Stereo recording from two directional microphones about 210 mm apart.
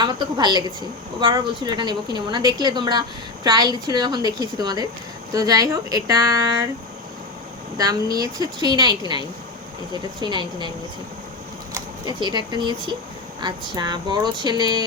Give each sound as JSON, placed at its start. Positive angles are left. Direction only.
{"t": 0.0, "sound": "a woman's voice", "side_deg": -20}
{"t": 7.8, "sound": "a woman's voice", "side_deg": -15}
{"t": 11.7, "sound": "a sound", "side_deg": -20}
{"t": 12.5, "sound": "a woman's voice", "side_deg": -20}